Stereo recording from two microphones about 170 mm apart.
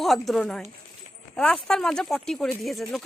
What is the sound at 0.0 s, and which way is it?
Speech, centre (ahead or behind).